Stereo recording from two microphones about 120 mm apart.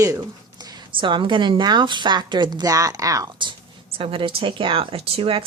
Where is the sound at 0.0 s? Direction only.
30° right (ahead or behind).